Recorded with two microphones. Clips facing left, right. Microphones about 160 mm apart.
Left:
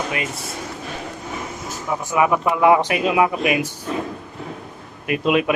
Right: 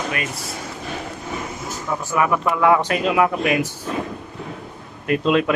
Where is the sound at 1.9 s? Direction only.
15° left (ahead or behind).